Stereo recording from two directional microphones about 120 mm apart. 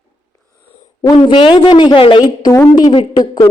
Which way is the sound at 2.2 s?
25° left (ahead or behind).